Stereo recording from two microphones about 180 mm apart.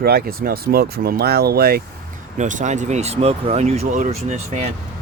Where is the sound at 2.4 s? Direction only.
45° right (ahead or behind).